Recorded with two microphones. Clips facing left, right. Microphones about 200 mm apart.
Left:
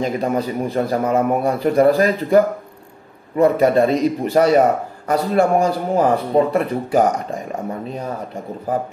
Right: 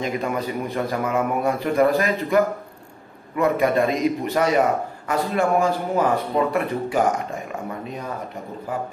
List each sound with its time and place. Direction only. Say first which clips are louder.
0.0 s a man's voice: left 5 dB; 35° left (ahead or behind)